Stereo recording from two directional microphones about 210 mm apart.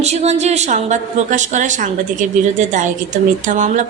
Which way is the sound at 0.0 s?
30° right (ahead or behind).